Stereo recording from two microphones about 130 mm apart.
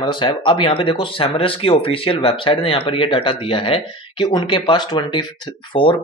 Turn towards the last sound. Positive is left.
turn(degrees=40)  # may be behind; listen again after turning